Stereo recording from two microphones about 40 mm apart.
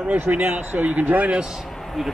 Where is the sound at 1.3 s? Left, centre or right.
Centre.